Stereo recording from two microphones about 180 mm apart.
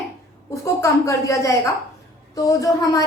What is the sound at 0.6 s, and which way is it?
A woman's voice, 15° left (ahead or behind).